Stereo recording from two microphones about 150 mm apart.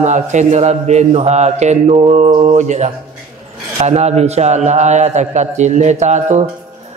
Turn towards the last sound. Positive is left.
turn(degrees=-50)  # may be behind; listen again after turning